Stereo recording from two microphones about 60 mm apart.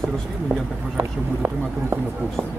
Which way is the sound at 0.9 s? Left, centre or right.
Right.